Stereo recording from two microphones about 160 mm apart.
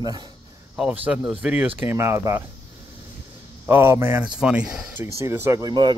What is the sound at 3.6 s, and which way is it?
Speech, 15° right (ahead or behind).